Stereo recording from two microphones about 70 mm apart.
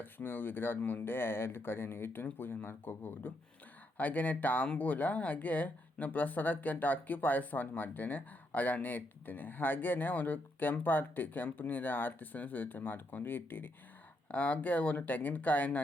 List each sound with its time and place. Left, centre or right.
0.0 s speech: left